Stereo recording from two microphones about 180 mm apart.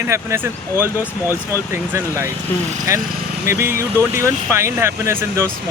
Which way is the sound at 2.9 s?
15° right (ahead or behind).